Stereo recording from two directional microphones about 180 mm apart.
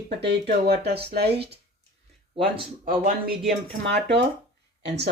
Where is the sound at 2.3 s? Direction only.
30° right (ahead or behind).